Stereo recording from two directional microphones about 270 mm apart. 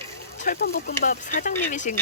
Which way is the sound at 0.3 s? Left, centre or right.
Left.